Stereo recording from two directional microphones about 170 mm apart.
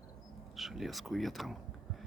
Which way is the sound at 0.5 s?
Centre (ahead or behind).